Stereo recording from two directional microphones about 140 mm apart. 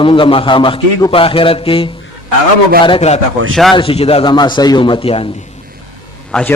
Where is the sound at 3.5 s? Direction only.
Centre (ahead or behind).